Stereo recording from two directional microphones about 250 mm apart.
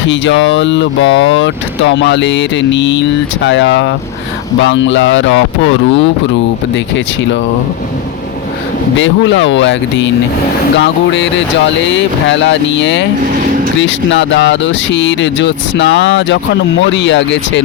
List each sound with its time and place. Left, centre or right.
0.1 s speech: left
9.0 s speech: left